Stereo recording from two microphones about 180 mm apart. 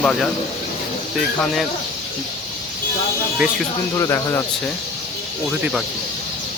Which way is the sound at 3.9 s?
15° left (ahead or behind).